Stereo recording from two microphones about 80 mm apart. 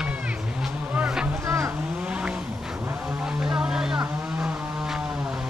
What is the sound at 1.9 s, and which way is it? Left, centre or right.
Vehicle, centre.